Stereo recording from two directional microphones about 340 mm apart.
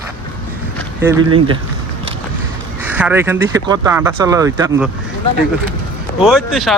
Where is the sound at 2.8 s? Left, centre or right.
Centre.